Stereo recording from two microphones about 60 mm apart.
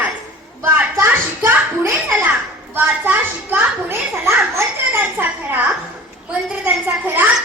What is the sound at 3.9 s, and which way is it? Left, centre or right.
A child's voice, right.